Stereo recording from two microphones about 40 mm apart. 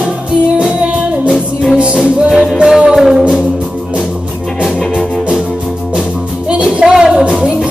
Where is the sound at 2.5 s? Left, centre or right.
Centre.